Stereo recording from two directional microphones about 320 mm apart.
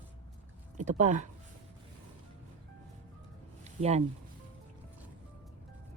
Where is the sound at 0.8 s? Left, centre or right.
Right.